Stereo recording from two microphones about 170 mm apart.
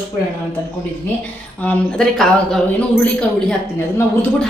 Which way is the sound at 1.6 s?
5° left (ahead or behind).